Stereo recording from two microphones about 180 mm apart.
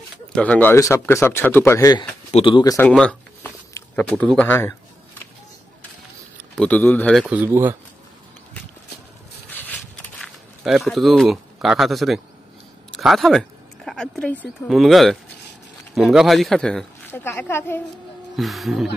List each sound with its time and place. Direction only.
0.3 s speech: 5° left (ahead or behind)
2.9 s a sound: 5° left (ahead or behind)
3.7 s speech: 10° left (ahead or behind)
6.5 s speech: 5° left (ahead or behind)
7.2 s speech: 10° right (ahead or behind)
9.5 s walk: 10° left (ahead or behind)
12.9 s speech: centre (ahead or behind)
18.3 s speech: centre (ahead or behind)